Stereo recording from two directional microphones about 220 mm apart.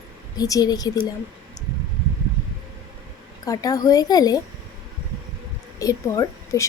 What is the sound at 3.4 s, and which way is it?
Speech, 15° left (ahead or behind).